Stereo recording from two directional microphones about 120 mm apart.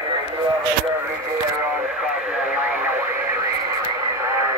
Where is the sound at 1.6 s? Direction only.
15° right (ahead or behind).